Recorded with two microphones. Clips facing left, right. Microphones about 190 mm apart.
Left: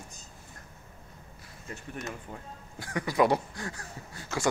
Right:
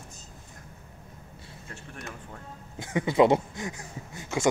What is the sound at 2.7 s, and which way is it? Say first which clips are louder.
Speech: right 5 dB; 20° right (ahead or behind).